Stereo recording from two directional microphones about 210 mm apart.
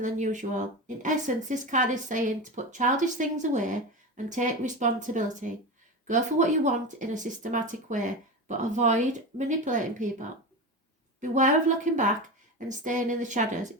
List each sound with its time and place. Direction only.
0.0 s speech: 35° right (ahead or behind)